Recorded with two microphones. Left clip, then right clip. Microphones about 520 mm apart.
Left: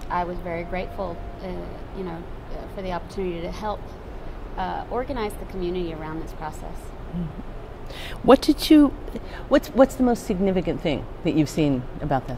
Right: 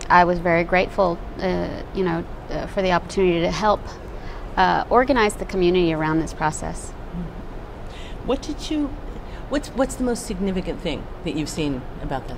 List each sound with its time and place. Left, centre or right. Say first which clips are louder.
0.1 s a woman's voice: right 11 dB; right
8.3 s speech: left 10 dB; left
9.5 s speech: left 6 dB; left